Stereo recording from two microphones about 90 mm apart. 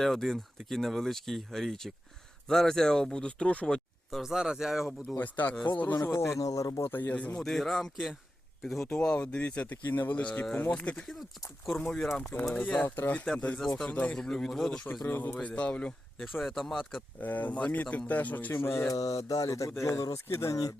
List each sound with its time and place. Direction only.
0.0 s speech: centre (ahead or behind)
4.1 s speech: 5° right (ahead or behind)
5.1 s speech: 20° left (ahead or behind)
6.1 s speech: 30° left (ahead or behind); by 7.4 s 15° left (ahead or behind)
7.4 s speech: centre (ahead or behind)
8.9 s speech: 10° left (ahead or behind)
12.3 s speech: 25° left (ahead or behind); by 14.8 s 5° left (ahead or behind)
15.0 s speech: 20° left (ahead or behind)
16.2 s speech: centre (ahead or behind)
17.2 s speech: 20° left (ahead or behind)
18.9 s speech: 40° left (ahead or behind)